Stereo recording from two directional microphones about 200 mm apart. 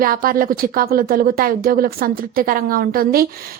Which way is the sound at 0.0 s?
45° right (ahead or behind).